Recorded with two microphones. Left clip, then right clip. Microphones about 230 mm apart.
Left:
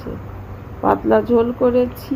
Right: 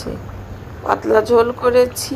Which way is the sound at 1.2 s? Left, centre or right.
Right.